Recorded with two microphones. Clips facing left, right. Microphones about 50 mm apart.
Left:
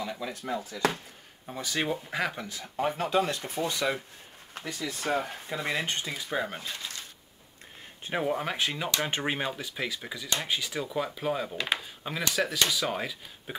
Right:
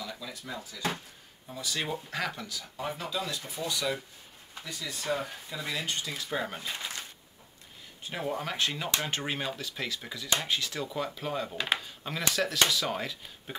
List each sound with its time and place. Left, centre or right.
0.0 s speech: left
1.9 s speech: centre
2.4 s speech: left
2.8 s speech: left
4.6 s speech: left
6.1 s speech: centre
6.7 s a sound: right
8.0 s speech: left; by 13.6 s centre